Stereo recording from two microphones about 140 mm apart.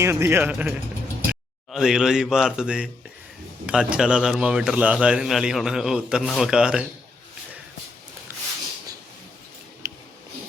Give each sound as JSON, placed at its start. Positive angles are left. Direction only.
{"t": 0.0, "sound": "speech", "side_deg": -20}
{"t": 1.7, "sound": "a man's voice", "side_deg": -5}
{"t": 9.8, "sound": "a sound", "side_deg": -20}